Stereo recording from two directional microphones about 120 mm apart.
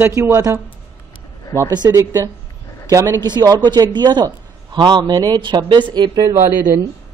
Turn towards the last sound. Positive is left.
turn(degrees=-25)  # may be behind; listen again after turning